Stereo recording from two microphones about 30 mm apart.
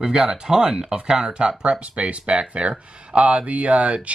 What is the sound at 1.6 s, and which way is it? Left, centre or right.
Speech, right.